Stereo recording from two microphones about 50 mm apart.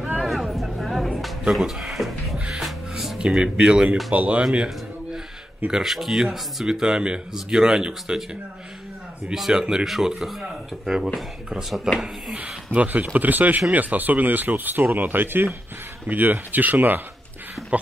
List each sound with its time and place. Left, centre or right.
0.2 s music: centre
1.5 s drawer open or close: centre
2.3 s music: centre
2.9 s music: centre
3.2 s speech: centre
4.1 s speech: right
5.7 s speech: centre
9.3 s speech: centre
11.9 s speech: centre
12.7 s speech: right